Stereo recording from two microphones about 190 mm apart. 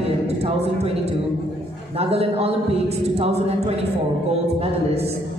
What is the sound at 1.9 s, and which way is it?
A woman's voice, 30° right (ahead or behind).